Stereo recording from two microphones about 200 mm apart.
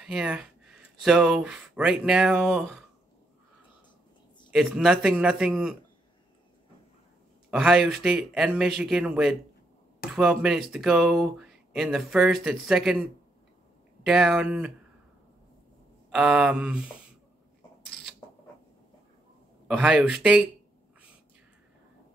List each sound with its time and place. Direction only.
0.0 s speech: 5° right (ahead or behind)
4.5 s speech: centre (ahead or behind)
7.5 s speech: centre (ahead or behind)
14.0 s speech: centre (ahead or behind)
16.1 s speech: 5° right (ahead or behind)
19.8 s speech: 5° right (ahead or behind)